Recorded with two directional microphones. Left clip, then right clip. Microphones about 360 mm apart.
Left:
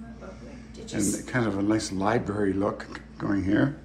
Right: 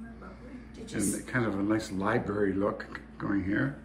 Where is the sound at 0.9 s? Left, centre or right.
Centre.